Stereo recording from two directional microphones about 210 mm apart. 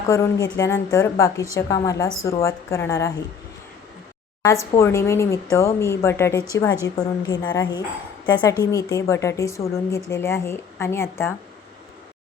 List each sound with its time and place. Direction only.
0.1 s a woman's voice: 15° left (ahead or behind)
4.8 s a woman's voice: 15° left (ahead or behind)